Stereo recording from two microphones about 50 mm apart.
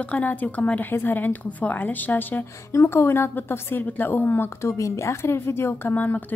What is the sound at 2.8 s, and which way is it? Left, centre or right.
A woman's voice, left.